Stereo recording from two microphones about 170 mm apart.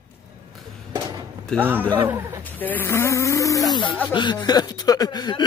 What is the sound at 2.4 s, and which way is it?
Speech, 10° left (ahead or behind).